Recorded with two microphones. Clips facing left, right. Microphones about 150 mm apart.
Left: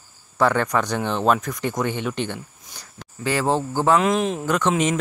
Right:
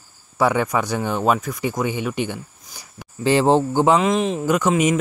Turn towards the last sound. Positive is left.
turn(degrees=-10)  # may be behind; listen again after turning